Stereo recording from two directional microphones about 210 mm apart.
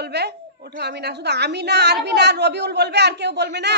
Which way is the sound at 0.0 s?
50° right (ahead or behind).